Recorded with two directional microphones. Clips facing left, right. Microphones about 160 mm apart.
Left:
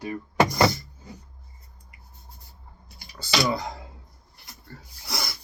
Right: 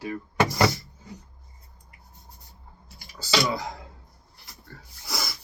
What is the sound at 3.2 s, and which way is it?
Speech, centre (ahead or behind).